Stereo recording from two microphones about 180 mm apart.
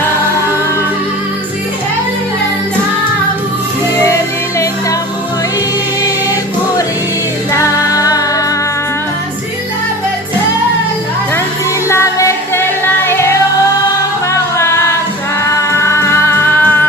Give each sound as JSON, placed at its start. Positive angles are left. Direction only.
{"t": 4.0, "sound": "music", "side_deg": 15}
{"t": 7.5, "sound": "music", "side_deg": 20}
{"t": 11.9, "sound": "music", "side_deg": 15}
{"t": 15.8, "sound": "music", "side_deg": 15}